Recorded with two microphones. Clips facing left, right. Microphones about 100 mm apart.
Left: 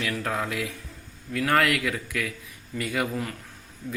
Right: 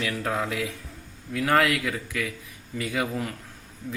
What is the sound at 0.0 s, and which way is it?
Speech, 20° right (ahead or behind).